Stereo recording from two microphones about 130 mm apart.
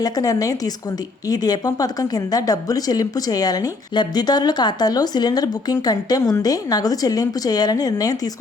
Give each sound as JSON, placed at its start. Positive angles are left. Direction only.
{"t": 0.0, "sound": "speech", "side_deg": 25}